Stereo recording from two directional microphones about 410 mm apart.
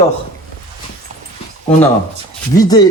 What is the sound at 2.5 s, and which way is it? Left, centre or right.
Speech, centre.